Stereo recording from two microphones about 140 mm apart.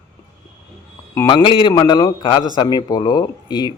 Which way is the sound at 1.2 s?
35° left (ahead or behind).